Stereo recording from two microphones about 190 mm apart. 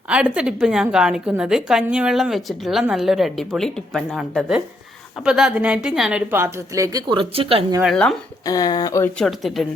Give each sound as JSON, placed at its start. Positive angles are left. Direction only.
{"t": 0.1, "sound": "a woman's voice", "side_deg": -5}
{"t": 8.4, "sound": "speech", "side_deg": 20}
{"t": 9.1, "sound": "a woman's voice", "side_deg": 0}